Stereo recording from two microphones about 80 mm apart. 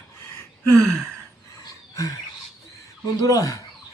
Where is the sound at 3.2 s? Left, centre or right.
Left.